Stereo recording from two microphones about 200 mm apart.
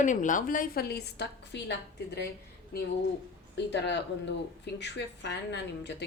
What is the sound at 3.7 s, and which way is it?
A woman's voice, 60° left (ahead or behind).